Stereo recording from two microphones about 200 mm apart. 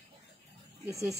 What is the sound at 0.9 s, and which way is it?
Speech, 15° right (ahead or behind).